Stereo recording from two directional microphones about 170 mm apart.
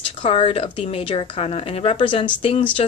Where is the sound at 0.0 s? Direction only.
30° left (ahead or behind).